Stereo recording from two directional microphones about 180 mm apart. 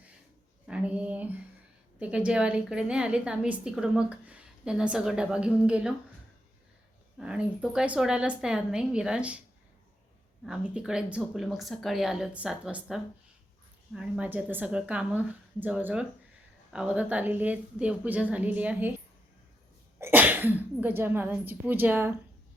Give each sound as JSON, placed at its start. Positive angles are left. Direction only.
{"t": 0.7, "sound": "a sound", "side_deg": -5}
{"t": 2.0, "sound": "a woman's voice", "side_deg": -5}
{"t": 7.2, "sound": "a woman's voice", "side_deg": -5}
{"t": 10.4, "sound": "a woman's voice", "side_deg": -5}
{"t": 20.0, "sound": "a woman's voice", "side_deg": -10}